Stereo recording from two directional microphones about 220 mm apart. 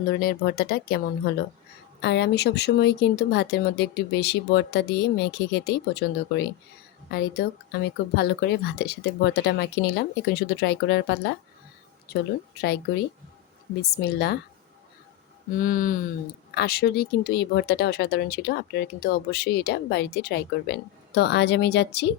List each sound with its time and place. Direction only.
0.1 s speech: 45° left (ahead or behind)
15.5 s a sound: 40° left (ahead or behind)
16.6 s speech: 45° left (ahead or behind)